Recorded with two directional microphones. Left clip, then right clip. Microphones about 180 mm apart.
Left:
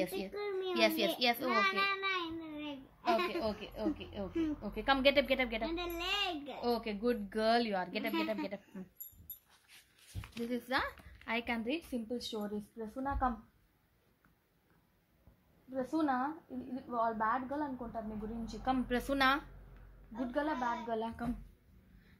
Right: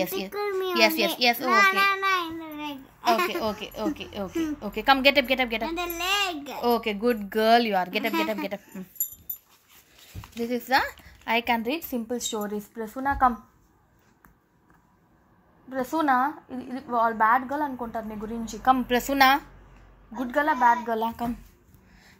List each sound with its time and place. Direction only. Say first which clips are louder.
0.3 s a sound: right 10 dB; 60° right (ahead or behind)
0.7 s a woman's voice: right 9 dB; 20° right (ahead or behind)
1.5 s a sound: right 12 dB; 55° right (ahead or behind)
3.3 s a woman's voice: right 9 dB; 30° right (ahead or behind)
5.7 s a child's voice: right 10 dB; 55° right (ahead or behind)
6.6 s a woman's voice: right 11 dB; 30° right (ahead or behind)
10.4 s a woman's voice: right 12 dB; 20° right (ahead or behind); by 13.3 s 35° right (ahead or behind)
15.7 s a woman's voice: right 11 dB; 35° right (ahead or behind)
18.6 s a woman's voice: right 13 dB; 30° right (ahead or behind)